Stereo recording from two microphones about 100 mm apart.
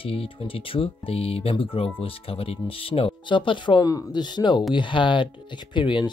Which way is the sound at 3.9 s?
40° left (ahead or behind).